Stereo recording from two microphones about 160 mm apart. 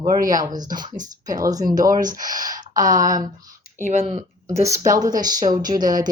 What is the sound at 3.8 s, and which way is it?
Speech, 35° right (ahead or behind).